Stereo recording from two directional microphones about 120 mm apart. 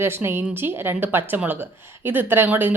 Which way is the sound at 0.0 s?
20° right (ahead or behind).